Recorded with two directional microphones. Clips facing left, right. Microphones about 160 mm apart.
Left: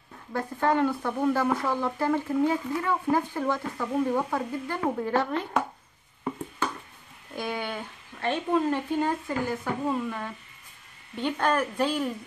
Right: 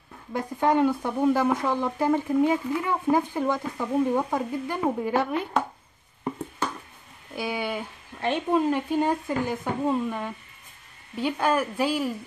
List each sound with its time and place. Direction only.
0.3 s speech: 15° right (ahead or behind)
7.3 s speech: 10° right (ahead or behind)
11.1 s speech: 5° right (ahead or behind)